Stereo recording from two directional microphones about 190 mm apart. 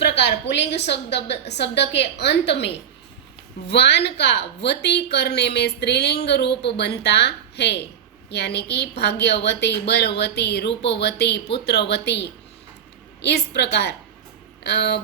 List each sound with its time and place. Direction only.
0.0 s a woman's voice: 65° left (ahead or behind)